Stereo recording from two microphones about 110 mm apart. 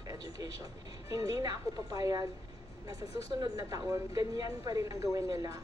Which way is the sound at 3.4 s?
30° right (ahead or behind).